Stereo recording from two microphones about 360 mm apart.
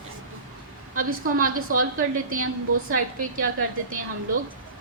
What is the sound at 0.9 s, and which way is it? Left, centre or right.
A woman's voice, right.